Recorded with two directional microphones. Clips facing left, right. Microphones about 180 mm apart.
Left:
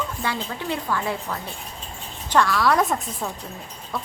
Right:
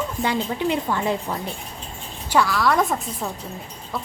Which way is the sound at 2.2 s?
5° right (ahead or behind).